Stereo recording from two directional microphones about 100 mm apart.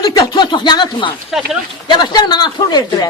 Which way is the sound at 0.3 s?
50° left (ahead or behind).